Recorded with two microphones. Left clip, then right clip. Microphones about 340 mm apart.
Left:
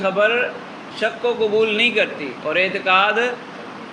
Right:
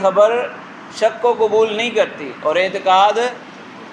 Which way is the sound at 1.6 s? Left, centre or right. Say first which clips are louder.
Right 1 dB; centre.